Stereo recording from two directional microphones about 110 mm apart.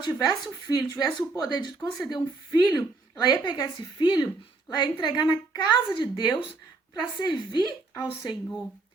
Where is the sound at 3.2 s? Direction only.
40° left (ahead or behind).